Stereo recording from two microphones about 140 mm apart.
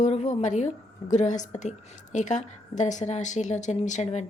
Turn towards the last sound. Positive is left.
turn(degrees=55)  # may be behind; listen again after turning